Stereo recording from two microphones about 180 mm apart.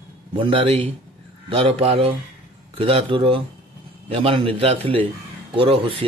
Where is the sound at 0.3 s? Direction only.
30° right (ahead or behind).